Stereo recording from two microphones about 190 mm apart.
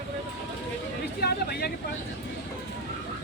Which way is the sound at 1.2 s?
55° left (ahead or behind).